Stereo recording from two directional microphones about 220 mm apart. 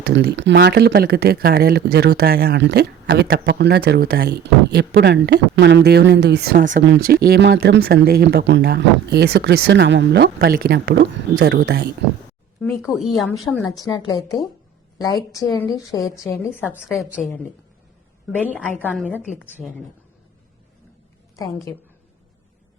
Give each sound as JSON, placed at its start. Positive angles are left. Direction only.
{"t": 0.0, "sound": "speech", "side_deg": -50}
{"t": 12.5, "sound": "speech", "side_deg": 0}
{"t": 13.7, "sound": "a woman's voice", "side_deg": 15}
{"t": 16.0, "sound": "a woman's voice", "side_deg": 15}
{"t": 16.4, "sound": "a woman's voice", "side_deg": -5}
{"t": 19.2, "sound": "speech", "side_deg": -5}